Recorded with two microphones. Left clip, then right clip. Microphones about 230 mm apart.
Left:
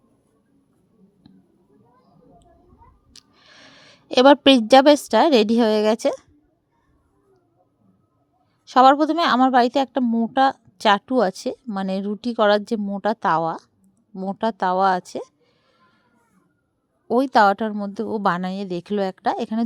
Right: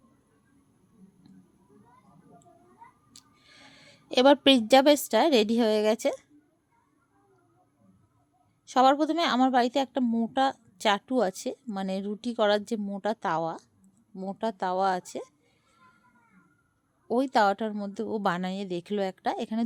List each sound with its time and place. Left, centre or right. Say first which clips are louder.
3.1 s a woman's voice: left 6 dB; centre
8.6 s a woman's voice: left 8 dB; centre
17.1 s a woman's voice: left 8 dB; centre